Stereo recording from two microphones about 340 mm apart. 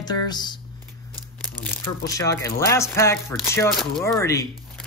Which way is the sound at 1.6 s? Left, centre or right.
Centre.